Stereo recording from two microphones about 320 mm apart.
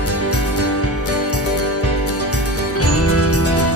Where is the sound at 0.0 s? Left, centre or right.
Left.